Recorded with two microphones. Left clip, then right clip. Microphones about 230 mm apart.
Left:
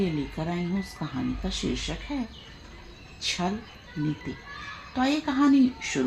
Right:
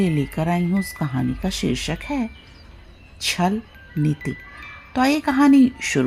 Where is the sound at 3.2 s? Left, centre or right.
Right.